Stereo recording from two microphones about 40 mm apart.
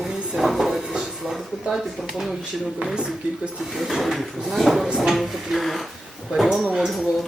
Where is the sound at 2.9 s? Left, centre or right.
Right.